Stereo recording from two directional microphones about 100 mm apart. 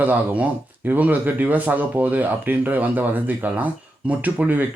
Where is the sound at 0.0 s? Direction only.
20° right (ahead or behind).